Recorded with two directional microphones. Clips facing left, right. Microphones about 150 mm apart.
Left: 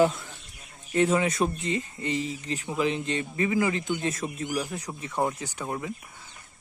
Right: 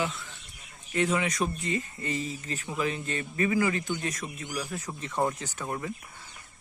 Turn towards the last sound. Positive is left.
turn(degrees=10)  # may be behind; listen again after turning